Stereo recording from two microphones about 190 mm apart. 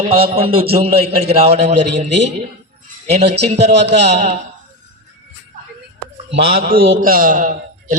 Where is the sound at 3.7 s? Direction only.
65° right (ahead or behind).